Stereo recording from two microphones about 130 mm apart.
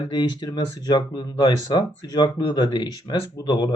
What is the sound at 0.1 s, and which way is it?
Speech, 35° left (ahead or behind).